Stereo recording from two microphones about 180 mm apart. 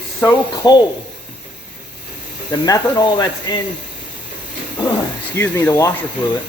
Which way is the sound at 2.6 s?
20° left (ahead or behind).